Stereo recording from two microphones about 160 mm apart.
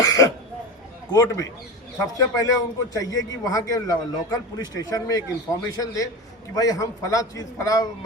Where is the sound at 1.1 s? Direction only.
20° left (ahead or behind).